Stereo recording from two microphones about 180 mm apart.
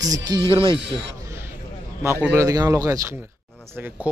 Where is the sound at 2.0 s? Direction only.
10° right (ahead or behind).